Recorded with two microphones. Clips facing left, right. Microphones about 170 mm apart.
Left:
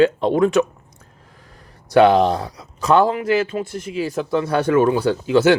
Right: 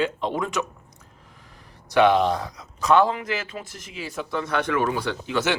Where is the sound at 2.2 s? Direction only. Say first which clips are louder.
Left 5 dB; 35° left (ahead or behind).